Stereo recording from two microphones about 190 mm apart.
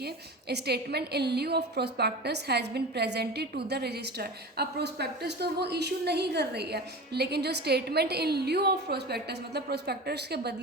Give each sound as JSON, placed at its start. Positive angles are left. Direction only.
{"t": 0.0, "sound": "a woman's voice", "side_deg": -60}